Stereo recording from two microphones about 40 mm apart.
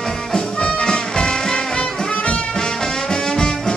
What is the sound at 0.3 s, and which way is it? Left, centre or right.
Music, centre.